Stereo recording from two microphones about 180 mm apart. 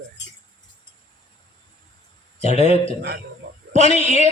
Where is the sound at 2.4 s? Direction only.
35° left (ahead or behind).